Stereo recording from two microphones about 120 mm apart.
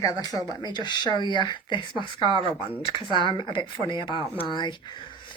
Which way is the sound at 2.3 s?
50° right (ahead or behind).